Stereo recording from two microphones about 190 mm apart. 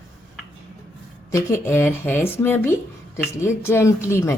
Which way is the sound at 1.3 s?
15° left (ahead or behind).